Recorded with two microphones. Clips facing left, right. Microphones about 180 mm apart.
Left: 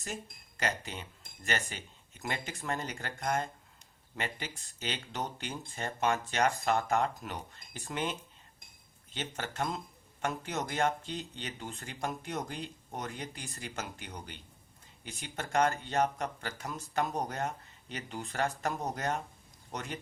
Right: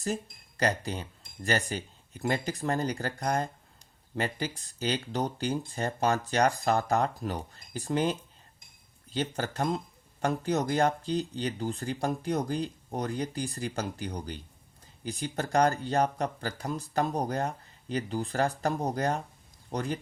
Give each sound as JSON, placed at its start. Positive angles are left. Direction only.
{"t": 0.0, "sound": "speech", "side_deg": -35}
{"t": 9.1, "sound": "speech", "side_deg": -35}